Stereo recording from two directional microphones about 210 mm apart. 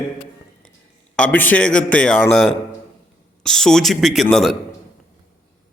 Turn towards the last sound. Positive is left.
turn(degrees=0)  # may be behind; listen again after turning